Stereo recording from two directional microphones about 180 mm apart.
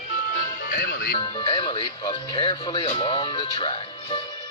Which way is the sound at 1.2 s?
25° left (ahead or behind).